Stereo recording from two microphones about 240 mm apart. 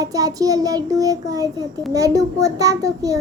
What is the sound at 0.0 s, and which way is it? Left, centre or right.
A child's voice, centre.